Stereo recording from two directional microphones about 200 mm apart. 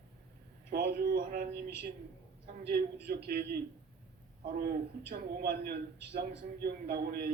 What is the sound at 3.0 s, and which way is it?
Speech, 50° right (ahead or behind).